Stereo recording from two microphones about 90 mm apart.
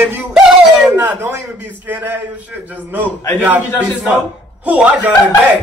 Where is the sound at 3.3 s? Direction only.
20° right (ahead or behind).